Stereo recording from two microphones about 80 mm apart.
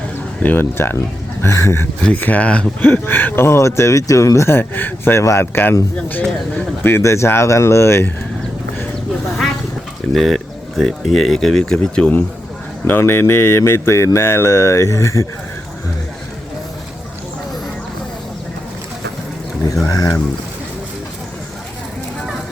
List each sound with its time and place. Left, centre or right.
0.4 s speech: left
2.0 s speech: centre
6.8 s speech: left
10.2 s speech: centre
12.8 s speech: left
19.9 s speech: left